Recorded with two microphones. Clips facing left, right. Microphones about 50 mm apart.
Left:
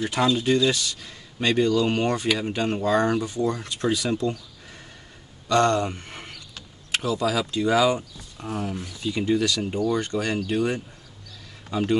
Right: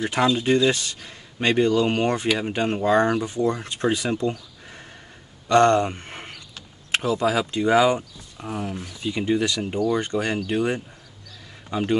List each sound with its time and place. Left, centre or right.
0.0 s speech: right
8.4 s speech: centre
9.0 s speech: right